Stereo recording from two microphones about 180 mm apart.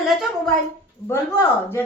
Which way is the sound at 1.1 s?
15° left (ahead or behind).